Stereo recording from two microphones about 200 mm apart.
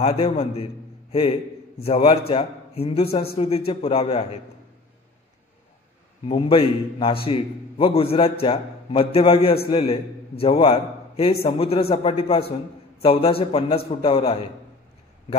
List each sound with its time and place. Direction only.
0.0 s a man's voice: 30° left (ahead or behind)
6.2 s a man's voice: 25° left (ahead or behind)